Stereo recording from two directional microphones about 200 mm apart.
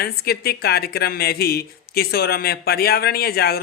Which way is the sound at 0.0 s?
50° left (ahead or behind).